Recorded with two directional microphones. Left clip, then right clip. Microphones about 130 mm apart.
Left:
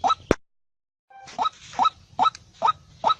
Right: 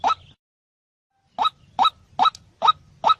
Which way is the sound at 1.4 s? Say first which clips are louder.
Right 3 dB; 15° right (ahead or behind).